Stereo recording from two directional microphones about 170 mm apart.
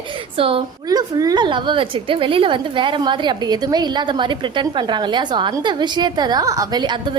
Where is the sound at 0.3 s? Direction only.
30° right (ahead or behind).